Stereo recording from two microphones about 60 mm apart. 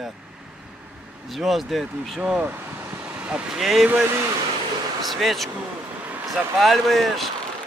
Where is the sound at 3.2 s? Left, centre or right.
Centre.